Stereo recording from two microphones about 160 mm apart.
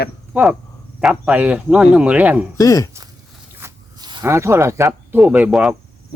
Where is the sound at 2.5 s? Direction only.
20° left (ahead or behind).